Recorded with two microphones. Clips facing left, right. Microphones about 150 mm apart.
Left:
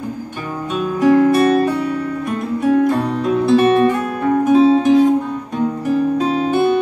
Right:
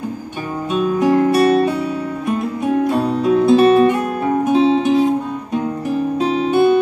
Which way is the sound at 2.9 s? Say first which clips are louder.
Right 1 dB; 5° right (ahead or behind).